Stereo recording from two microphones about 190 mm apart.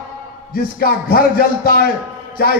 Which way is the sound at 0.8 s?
50° left (ahead or behind).